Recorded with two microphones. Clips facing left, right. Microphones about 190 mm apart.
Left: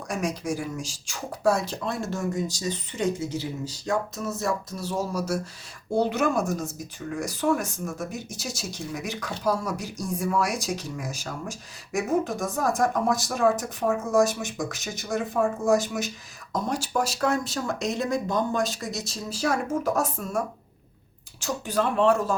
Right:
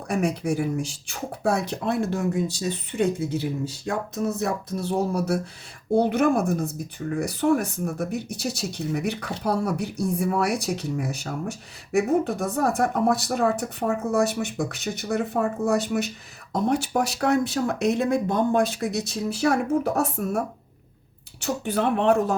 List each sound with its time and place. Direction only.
0.1 s speech: 65° right (ahead or behind)
21.4 s speech: 60° right (ahead or behind)